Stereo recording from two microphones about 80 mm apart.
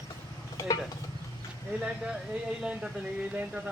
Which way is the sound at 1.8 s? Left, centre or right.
Centre.